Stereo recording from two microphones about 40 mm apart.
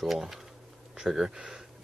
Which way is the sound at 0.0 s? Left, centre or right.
Centre.